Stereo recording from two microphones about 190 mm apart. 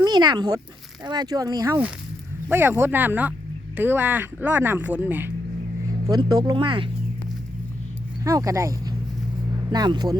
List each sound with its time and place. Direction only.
0.0 s speech: 20° right (ahead or behind)
6.1 s speech: 20° right (ahead or behind)
8.2 s speech: 15° right (ahead or behind)